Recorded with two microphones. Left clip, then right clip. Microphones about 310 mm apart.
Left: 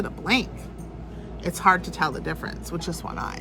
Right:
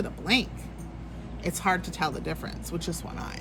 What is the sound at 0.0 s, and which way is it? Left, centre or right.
Speech, centre.